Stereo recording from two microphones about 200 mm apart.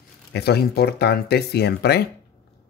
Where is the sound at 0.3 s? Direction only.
55° left (ahead or behind).